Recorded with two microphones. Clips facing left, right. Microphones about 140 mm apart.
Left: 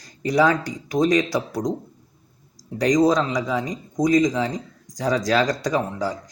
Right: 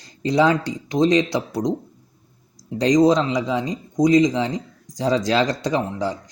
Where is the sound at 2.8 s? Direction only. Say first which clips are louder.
Right 2 dB; 25° right (ahead or behind).